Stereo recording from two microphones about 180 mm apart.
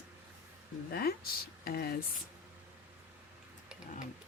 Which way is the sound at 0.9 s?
60° left (ahead or behind).